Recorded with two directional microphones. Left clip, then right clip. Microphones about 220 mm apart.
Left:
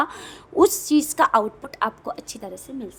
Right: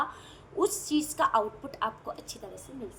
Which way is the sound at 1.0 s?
40° left (ahead or behind).